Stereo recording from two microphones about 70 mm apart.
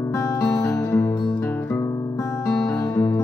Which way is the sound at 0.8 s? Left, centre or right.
Left.